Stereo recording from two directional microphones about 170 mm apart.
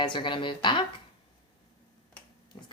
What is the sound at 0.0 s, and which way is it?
Speech, 30° left (ahead or behind).